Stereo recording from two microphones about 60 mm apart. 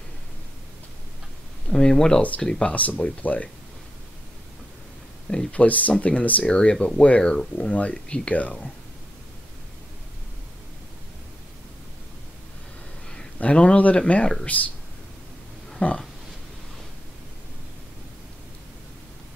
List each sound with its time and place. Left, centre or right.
1.7 s speech: centre
2.6 s speech: left
5.5 s speech: left
13.4 s speech: left
15.8 s speech: left